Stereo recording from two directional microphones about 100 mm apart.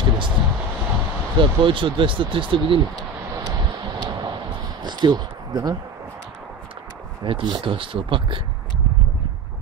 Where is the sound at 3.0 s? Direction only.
40° right (ahead or behind).